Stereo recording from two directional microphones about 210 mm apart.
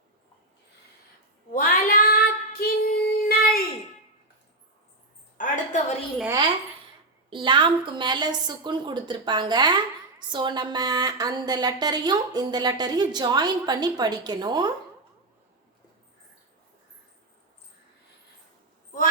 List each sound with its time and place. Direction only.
1.5 s child singing: 40° left (ahead or behind)
5.4 s a sound: 35° left (ahead or behind)
7.3 s a woman's voice: 25° right (ahead or behind)